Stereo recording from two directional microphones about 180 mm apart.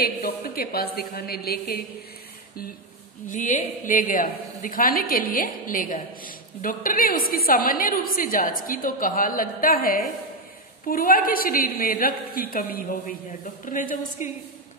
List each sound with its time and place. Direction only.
0.0 s a woman's voice: 55° left (ahead or behind)
3.3 s a woman's voice: 45° left (ahead or behind)